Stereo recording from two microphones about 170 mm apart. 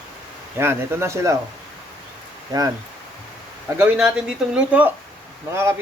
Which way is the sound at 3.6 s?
10° right (ahead or behind).